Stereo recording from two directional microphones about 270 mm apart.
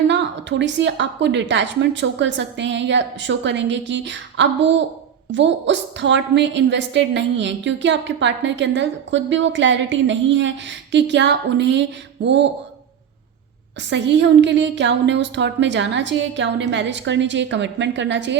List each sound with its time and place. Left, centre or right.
0.1 s a woman's voice: right
13.9 s a woman's voice: right